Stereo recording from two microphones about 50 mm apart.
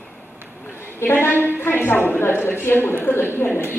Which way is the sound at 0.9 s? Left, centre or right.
Left.